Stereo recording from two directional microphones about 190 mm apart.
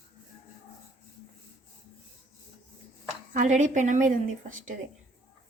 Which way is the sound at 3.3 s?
40° right (ahead or behind).